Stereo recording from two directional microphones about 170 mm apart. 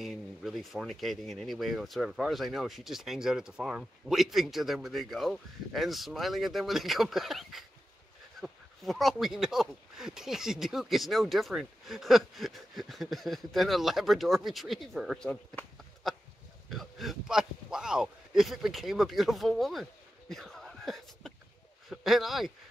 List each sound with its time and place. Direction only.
0.0 s speech: centre (ahead or behind)